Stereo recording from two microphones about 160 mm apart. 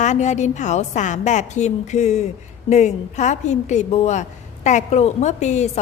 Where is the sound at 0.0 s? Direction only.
45° left (ahead or behind).